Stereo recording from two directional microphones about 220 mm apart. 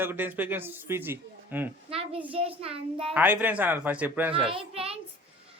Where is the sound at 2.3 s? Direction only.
25° right (ahead or behind).